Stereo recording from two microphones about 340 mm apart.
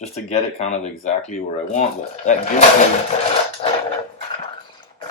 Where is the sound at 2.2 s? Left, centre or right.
Left.